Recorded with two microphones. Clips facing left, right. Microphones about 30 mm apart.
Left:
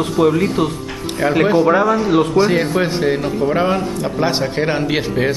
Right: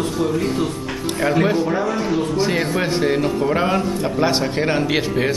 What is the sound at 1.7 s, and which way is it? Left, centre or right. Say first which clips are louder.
Speech: left 7 dB; left.